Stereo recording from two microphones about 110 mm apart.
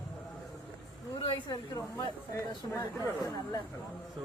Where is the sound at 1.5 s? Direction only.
35° left (ahead or behind).